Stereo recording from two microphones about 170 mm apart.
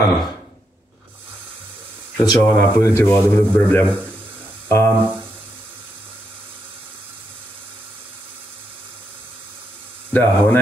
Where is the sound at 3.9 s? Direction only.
10° right (ahead or behind).